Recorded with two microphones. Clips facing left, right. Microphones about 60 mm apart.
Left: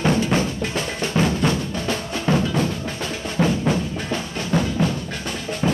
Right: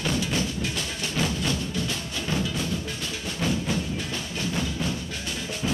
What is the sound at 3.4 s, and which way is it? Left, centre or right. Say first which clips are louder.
Music: left 2 dB; left.